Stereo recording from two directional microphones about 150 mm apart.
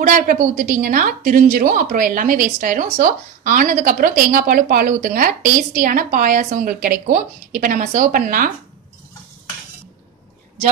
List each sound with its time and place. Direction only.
0.0 s a woman's voice: 60° right (ahead or behind)